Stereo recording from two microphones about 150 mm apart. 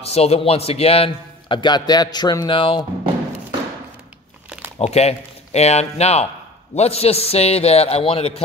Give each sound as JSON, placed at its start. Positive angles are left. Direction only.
{"t": 0.0, "sound": "a man's voice", "side_deg": 45}
{"t": 4.7, "sound": "a man's voice", "side_deg": 45}